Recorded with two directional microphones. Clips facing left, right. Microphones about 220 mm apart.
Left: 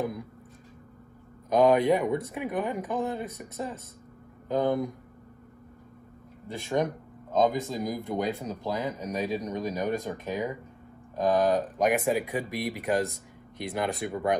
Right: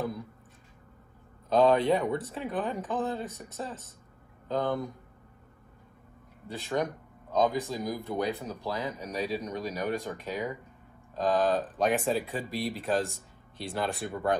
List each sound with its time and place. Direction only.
1.5 s speech: 15° left (ahead or behind)
6.5 s speech: 20° left (ahead or behind)